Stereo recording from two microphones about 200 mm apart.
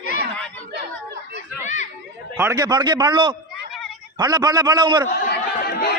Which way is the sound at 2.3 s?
15° right (ahead or behind).